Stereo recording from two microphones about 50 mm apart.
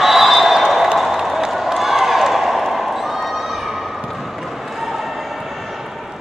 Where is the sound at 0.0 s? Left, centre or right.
Centre.